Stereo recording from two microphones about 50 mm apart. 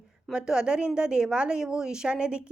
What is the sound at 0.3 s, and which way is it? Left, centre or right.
A woman's voice, centre.